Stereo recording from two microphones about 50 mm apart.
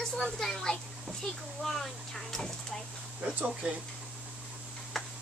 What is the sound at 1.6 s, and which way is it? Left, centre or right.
Speech, centre.